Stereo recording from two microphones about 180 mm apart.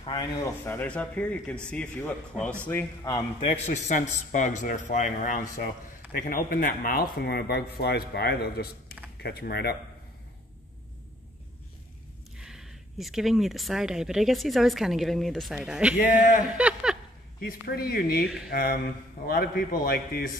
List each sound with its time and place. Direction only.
0.0 s speech: 20° left (ahead or behind)
3.6 s a man's voice: 40° left (ahead or behind); by 9.8 s 65° left (ahead or behind)
12.4 s speech: 5° right (ahead or behind)
16.0 s a man's voice: 50° left (ahead or behind)
16.5 s a sound: 5° right (ahead or behind)
17.5 s speech: 55° left (ahead or behind)